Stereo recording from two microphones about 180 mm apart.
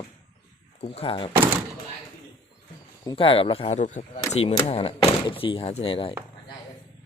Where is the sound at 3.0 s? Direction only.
30° left (ahead or behind).